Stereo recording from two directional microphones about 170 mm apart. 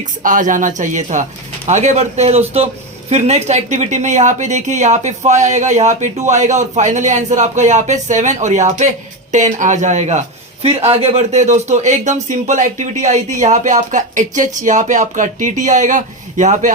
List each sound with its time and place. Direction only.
0.2 s speech: 50° right (ahead or behind)